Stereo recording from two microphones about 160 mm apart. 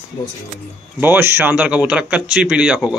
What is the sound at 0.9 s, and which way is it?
A man's voice, 15° right (ahead or behind).